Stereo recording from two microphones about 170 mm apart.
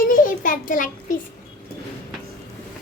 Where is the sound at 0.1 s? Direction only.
50° left (ahead or behind).